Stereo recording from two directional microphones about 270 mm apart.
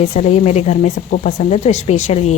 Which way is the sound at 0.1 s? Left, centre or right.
Left.